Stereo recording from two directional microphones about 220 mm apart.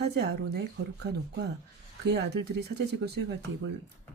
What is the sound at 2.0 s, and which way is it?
Speech, 50° right (ahead or behind).